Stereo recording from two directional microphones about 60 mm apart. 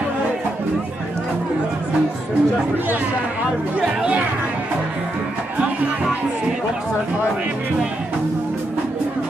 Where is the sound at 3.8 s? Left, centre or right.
Centre.